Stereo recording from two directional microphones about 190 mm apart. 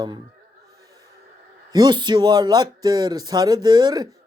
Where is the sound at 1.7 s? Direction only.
20° right (ahead or behind).